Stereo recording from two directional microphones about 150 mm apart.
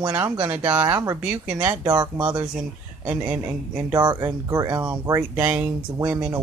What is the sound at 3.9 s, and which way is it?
Speech, 25° right (ahead or behind).